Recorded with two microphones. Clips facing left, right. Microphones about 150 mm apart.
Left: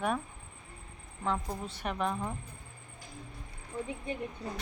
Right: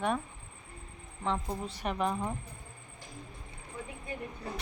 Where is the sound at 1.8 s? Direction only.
Centre (ahead or behind).